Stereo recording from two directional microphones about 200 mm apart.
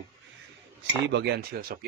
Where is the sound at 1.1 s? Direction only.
55° right (ahead or behind).